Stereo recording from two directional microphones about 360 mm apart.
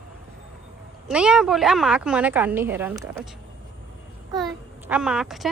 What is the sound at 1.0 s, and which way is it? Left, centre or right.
A woman's voice, centre.